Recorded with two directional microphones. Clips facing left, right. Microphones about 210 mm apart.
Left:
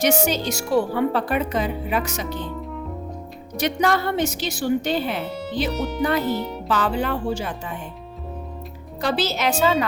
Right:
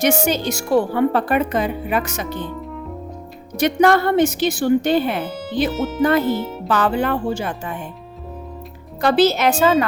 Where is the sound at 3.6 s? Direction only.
55° right (ahead or behind).